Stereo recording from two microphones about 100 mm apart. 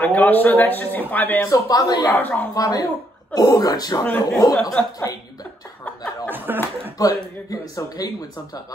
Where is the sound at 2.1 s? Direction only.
20° left (ahead or behind).